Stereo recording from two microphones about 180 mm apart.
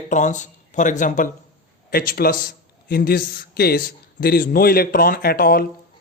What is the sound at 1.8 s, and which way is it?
Speech, 55° left (ahead or behind).